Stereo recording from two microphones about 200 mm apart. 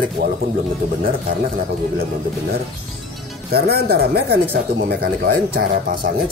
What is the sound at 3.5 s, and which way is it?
Speech, 50° right (ahead or behind).